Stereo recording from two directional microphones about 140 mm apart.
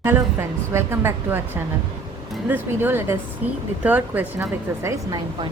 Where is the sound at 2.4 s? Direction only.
15° right (ahead or behind).